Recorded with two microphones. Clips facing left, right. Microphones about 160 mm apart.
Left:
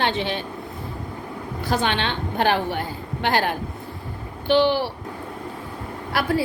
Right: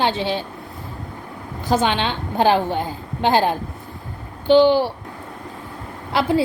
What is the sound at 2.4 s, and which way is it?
A woman's voice, 15° right (ahead or behind).